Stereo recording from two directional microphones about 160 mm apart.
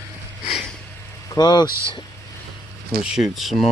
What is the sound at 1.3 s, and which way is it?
Speech, 25° left (ahead or behind).